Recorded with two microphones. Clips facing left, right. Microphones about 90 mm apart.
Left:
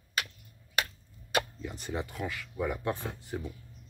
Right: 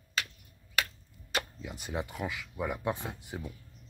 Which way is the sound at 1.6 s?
5° right (ahead or behind).